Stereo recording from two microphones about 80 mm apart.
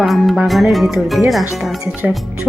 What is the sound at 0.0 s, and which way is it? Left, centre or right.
Music, centre.